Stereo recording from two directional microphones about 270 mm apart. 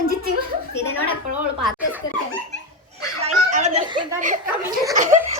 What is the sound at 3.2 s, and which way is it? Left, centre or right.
Snicker, right.